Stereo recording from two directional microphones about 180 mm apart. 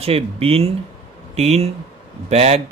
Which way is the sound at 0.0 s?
35° right (ahead or behind).